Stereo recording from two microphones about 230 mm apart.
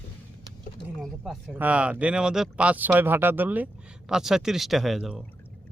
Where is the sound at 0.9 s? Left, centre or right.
Centre.